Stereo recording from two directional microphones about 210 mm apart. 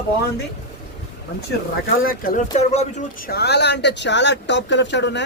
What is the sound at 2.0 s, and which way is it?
Speech, 40° left (ahead or behind).